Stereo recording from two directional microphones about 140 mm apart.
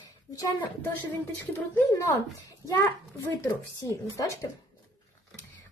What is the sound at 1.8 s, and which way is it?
Speech, 20° left (ahead or behind).